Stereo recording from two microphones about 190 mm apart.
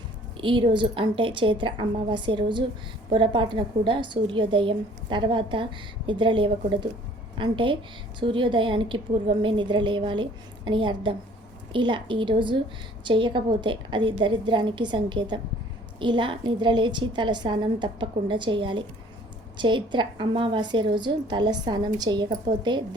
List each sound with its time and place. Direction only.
0.3 s a woman's voice: 25° right (ahead or behind)